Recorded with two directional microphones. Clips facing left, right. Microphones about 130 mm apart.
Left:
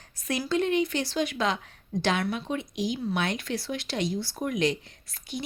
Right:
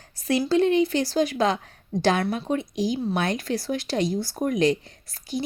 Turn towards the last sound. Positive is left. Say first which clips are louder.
# right 6 dB
turn(degrees=-40)  # may be behind; listen again after turning